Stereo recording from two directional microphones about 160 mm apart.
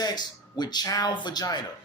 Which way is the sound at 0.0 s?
25° left (ahead or behind).